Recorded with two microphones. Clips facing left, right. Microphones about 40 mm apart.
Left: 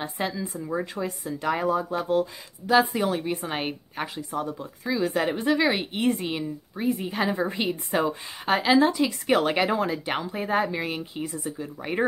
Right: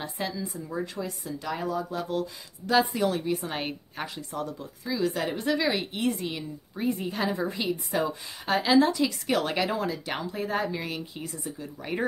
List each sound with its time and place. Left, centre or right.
0.0 s speech: left
2.6 s a woman's voice: centre; by 6.4 s left
6.8 s speech: centre
7.1 s a woman's voice: centre
7.3 s speech: left
8.8 s a woman's voice: centre